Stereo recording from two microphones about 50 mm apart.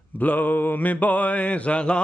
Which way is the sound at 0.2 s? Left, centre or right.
Left.